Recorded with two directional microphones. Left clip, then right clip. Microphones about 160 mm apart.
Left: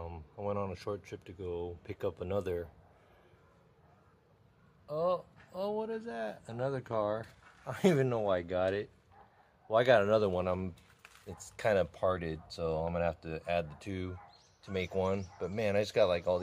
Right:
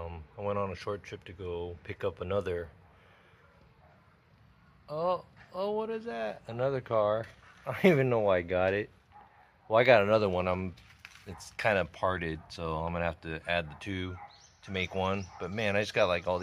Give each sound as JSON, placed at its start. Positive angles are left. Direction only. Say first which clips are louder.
{"t": 0.0, "sound": "speech", "louder": "right 3 dB", "side_deg": 10}
{"t": 4.8, "sound": "a man's voice", "louder": "right 1 dB", "side_deg": 0}
{"t": 7.6, "sound": "speech", "louder": "right 4 dB", "side_deg": -30}
{"t": 9.7, "sound": "speech", "louder": "right 3 dB", "side_deg": -20}